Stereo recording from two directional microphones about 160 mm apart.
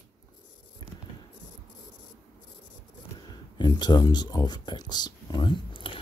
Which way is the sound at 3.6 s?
25° left (ahead or behind).